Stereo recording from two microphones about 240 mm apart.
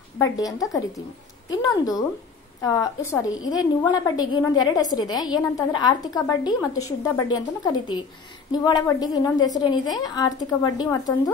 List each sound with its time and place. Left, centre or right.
0.2 s a woman's voice: centre